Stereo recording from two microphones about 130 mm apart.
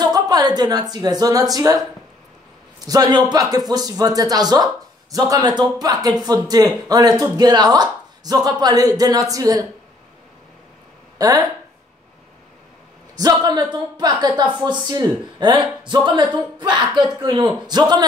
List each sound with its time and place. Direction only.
0.0 s a woman's voice: 30° right (ahead or behind)
2.8 s speech: 30° right (ahead or behind)
11.1 s speech: 30° right (ahead or behind)
13.1 s speech: 30° right (ahead or behind)